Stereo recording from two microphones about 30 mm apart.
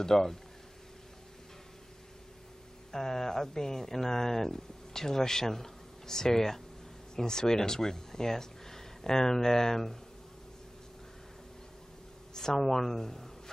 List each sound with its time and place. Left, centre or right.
0.0 s a woman's voice: centre
2.9 s speech: centre
12.4 s a woman's voice: centre